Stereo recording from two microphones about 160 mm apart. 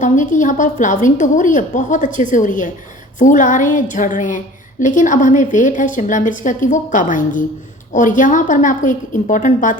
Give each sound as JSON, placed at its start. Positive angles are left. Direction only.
{"t": 0.0, "sound": "a woman's voice", "side_deg": 55}